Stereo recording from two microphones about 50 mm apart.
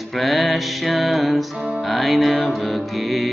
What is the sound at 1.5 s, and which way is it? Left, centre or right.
Music, centre.